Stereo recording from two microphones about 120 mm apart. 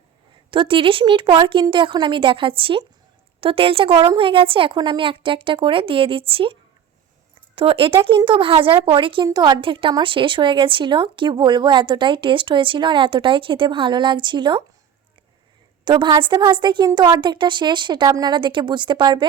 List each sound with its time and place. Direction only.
0.5 s a woman's voice: 45° right (ahead or behind)
9.2 s a woman's voice: 35° right (ahead or behind)
15.8 s a woman's voice: 40° right (ahead or behind)